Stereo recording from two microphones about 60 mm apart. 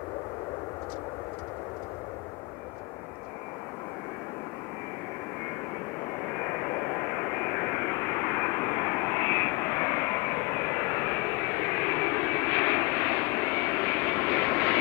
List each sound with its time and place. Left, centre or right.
6.4 s vehicle: left